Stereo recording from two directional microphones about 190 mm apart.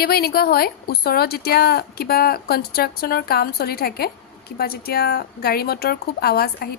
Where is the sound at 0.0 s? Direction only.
55° left (ahead or behind).